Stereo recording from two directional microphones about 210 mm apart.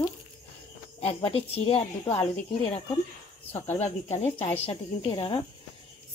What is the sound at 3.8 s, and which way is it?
Speech, 30° left (ahead or behind).